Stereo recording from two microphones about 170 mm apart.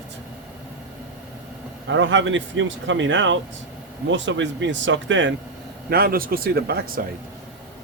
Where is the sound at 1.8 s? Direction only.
90° right.